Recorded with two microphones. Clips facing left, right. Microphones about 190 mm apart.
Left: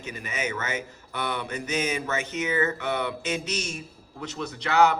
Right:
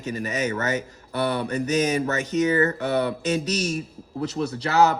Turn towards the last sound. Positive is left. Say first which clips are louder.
# right 2 dB
turn(degrees=-35)  # may be behind; listen again after turning